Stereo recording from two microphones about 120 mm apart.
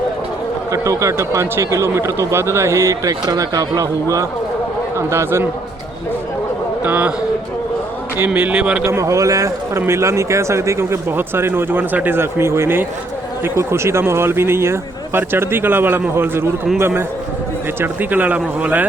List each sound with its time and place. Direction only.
0.7 s speech: 25° right (ahead or behind)
6.8 s speech: 15° right (ahead or behind)
8.2 s speech: 15° right (ahead or behind)
8.9 s speech: 25° right (ahead or behind)